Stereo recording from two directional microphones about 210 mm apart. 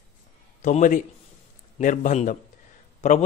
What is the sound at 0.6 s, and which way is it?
A man's voice, 35° left (ahead or behind).